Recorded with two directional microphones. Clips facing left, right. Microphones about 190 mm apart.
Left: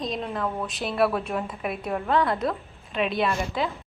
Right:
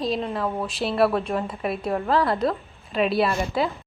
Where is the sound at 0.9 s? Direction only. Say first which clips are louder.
Right 2 dB; centre (ahead or behind).